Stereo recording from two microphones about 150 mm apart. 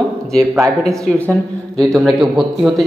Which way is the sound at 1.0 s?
10° left (ahead or behind).